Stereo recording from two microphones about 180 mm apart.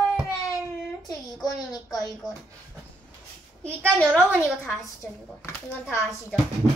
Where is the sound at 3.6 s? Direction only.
5° left (ahead or behind).